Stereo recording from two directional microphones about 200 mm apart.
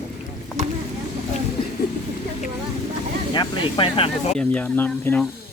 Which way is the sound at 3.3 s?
25° left (ahead or behind).